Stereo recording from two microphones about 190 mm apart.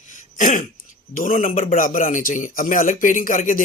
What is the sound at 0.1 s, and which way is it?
Throat clearing, 40° left (ahead or behind).